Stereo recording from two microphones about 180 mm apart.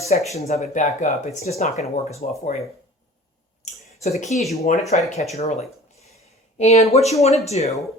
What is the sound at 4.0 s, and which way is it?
Speech, 40° left (ahead or behind).